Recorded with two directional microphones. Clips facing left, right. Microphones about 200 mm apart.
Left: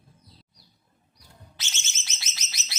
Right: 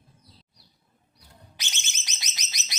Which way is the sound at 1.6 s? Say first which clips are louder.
Right 2 dB; 15° right (ahead or behind).